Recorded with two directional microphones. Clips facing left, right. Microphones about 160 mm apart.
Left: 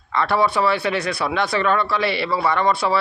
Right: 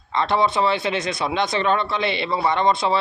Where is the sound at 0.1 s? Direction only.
20° right (ahead or behind).